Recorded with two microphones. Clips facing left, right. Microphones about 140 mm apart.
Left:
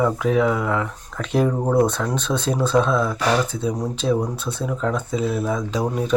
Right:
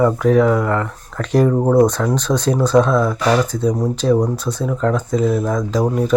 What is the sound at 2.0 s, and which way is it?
Speech, centre (ahead or behind).